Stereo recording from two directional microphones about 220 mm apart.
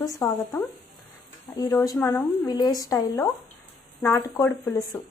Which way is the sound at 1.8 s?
15° left (ahead or behind).